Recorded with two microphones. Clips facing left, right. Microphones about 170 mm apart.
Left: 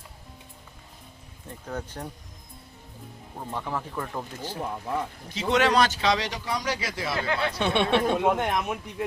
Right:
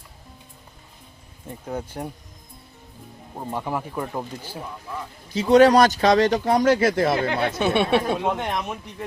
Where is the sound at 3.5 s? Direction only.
15° right (ahead or behind).